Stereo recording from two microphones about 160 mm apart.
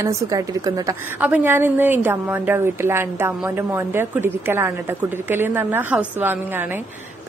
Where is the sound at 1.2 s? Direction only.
10° right (ahead or behind).